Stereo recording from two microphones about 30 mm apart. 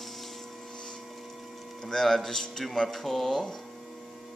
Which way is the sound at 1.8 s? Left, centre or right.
Centre.